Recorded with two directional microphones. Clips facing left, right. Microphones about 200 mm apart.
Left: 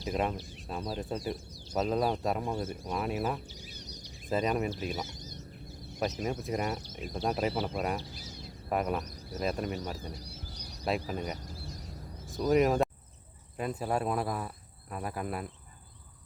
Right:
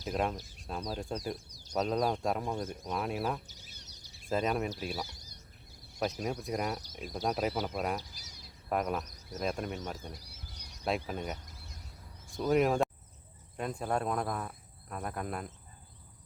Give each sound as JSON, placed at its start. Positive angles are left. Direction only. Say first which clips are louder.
{"t": 0.0, "sound": "cricket", "louder": "left 1 dB", "side_deg": 0}
{"t": 3.8, "sound": "bird", "louder": "left 10 dB", "side_deg": 15}
{"t": 4.3, "sound": "cricket", "louder": "left 2 dB", "side_deg": 0}
{"t": 4.9, "sound": "speech", "louder": "left 2 dB", "side_deg": 20}
{"t": 6.0, "sound": "cricket", "louder": "left 1 dB", "side_deg": 0}
{"t": 8.7, "sound": "cricket", "louder": "left 1 dB", "side_deg": 0}
{"t": 10.0, "sound": "bird", "louder": "left 4 dB", "side_deg": 35}
{"t": 10.8, "sound": "cricket", "louder": "left 1 dB", "side_deg": 0}
{"t": 11.3, "sound": "a sound", "louder": "left 9 dB", "side_deg": 30}
{"t": 12.3, "sound": "speech", "louder": "left 2 dB", "side_deg": 0}
{"t": 13.6, "sound": "cricket", "louder": "left 2 dB", "side_deg": 5}